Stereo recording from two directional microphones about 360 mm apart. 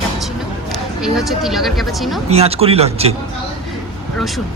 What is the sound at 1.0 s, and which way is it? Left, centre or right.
Speech, centre.